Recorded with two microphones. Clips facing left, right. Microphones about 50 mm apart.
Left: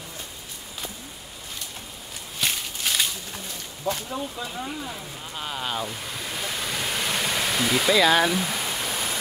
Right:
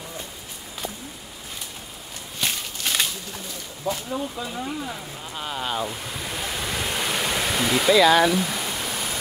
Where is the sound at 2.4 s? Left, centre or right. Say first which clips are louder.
Even; centre.